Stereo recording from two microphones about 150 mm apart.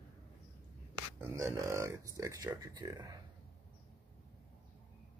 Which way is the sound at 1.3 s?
20° right (ahead or behind).